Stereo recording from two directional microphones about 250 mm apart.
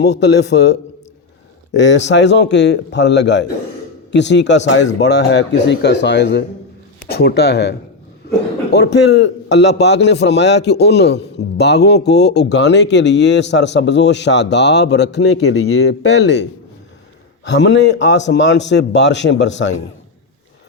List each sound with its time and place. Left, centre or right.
0.0 s a man's voice: left